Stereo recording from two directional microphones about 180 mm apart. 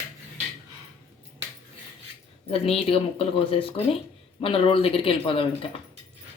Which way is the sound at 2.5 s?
35° left (ahead or behind).